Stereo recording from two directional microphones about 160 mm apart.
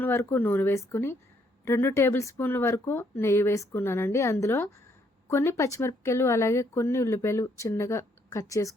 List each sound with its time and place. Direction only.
0.0 s speech: 15° left (ahead or behind)